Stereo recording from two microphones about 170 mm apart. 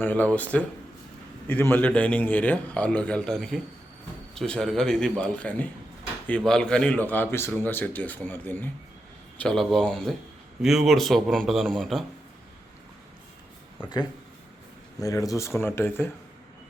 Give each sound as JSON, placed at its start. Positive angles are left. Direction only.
{"t": 0.0, "sound": "speech", "side_deg": 10}
{"t": 1.7, "sound": "a man's voice", "side_deg": 10}
{"t": 14.9, "sound": "speech", "side_deg": 20}